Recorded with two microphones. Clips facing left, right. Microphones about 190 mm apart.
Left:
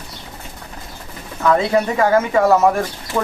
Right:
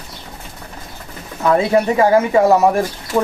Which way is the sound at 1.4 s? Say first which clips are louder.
Right 2 dB; 20° right (ahead or behind).